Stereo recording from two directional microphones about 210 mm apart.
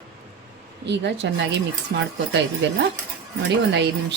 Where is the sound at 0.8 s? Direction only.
55° right (ahead or behind).